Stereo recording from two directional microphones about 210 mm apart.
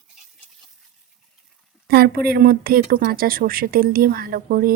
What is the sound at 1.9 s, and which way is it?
Speech, 45° right (ahead or behind).